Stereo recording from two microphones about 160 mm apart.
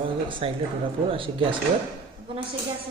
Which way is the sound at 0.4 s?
35° right (ahead or behind).